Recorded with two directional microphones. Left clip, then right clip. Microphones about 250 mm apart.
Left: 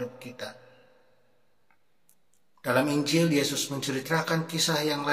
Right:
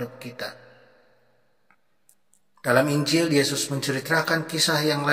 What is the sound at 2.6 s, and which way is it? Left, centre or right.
A man's voice, right.